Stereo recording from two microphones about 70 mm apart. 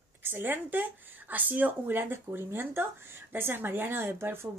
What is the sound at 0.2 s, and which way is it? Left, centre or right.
Speech, right.